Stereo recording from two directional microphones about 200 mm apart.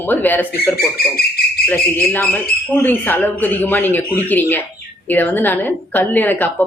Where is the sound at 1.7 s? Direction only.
10° left (ahead or behind).